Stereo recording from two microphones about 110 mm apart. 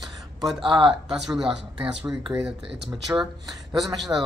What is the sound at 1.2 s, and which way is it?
A man's voice, 5° right (ahead or behind).